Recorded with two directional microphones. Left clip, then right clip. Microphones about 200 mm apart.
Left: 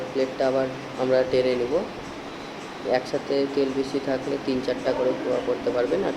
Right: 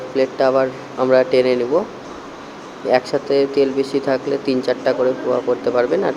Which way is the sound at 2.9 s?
25° right (ahead or behind).